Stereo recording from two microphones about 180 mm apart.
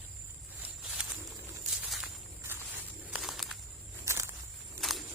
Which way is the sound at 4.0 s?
15° right (ahead or behind).